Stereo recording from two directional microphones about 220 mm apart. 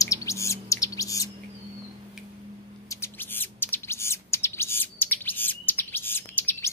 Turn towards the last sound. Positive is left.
turn(degrees=10)  # may be behind; listen again after turning